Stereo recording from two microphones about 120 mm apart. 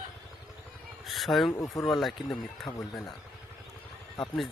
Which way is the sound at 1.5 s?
30° left (ahead or behind).